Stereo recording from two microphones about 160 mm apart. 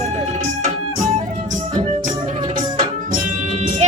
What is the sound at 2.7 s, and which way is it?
Music, 30° right (ahead or behind).